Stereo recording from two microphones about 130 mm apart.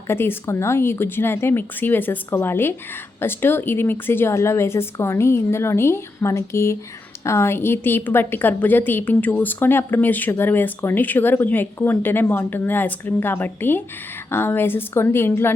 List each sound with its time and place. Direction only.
0.1 s a woman's voice: 20° left (ahead or behind)